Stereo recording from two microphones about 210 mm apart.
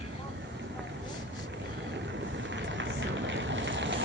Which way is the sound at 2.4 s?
60° right (ahead or behind).